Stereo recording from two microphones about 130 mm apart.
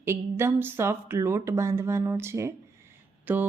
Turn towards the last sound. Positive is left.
turn(degrees=-15)  # may be behind; listen again after turning